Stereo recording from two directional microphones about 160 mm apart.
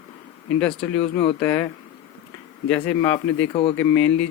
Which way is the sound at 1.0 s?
35° left (ahead or behind).